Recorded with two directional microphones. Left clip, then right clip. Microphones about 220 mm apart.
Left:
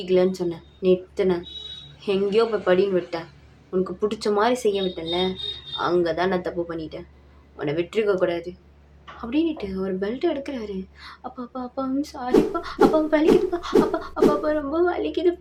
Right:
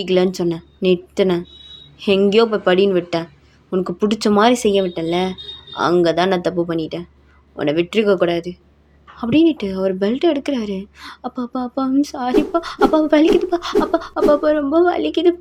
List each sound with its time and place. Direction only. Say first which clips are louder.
0.0 s speech: right 4 dB; 40° right (ahead or behind)